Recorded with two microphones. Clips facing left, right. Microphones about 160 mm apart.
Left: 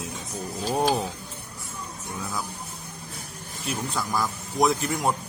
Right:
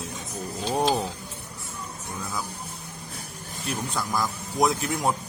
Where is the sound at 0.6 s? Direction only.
5° left (ahead or behind).